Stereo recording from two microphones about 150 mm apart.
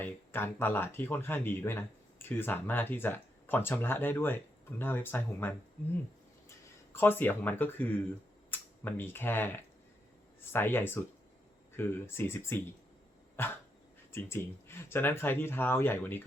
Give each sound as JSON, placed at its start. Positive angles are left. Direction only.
{"t": 0.0, "sound": "speech", "side_deg": 15}
{"t": 6.9, "sound": "speech", "side_deg": 15}